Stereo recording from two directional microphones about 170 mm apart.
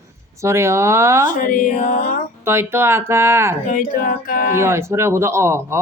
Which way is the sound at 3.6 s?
55° left (ahead or behind).